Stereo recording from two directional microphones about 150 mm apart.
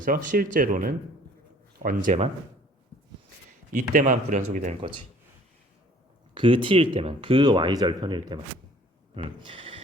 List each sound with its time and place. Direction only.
0.0 s speech: 65° right (ahead or behind)
3.7 s speech: 60° right (ahead or behind)
6.3 s speech: 35° right (ahead or behind)